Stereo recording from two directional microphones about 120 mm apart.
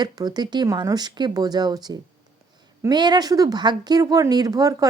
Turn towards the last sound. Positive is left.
turn(degrees=-30)  # may be behind; listen again after turning